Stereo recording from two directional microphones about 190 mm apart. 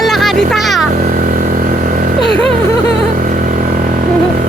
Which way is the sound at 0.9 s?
45° right (ahead or behind).